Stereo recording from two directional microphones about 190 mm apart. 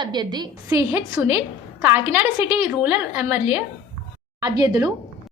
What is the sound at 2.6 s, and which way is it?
Speech, centre (ahead or behind).